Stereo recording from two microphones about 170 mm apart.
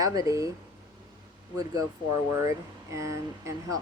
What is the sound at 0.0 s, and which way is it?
Speech, 20° right (ahead or behind).